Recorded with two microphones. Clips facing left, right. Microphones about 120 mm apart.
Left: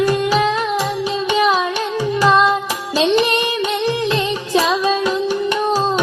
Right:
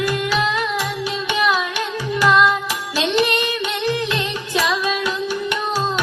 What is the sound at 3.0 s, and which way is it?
Music, 35° left (ahead or behind).